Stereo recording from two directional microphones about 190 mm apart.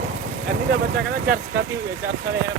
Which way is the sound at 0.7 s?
55° right (ahead or behind).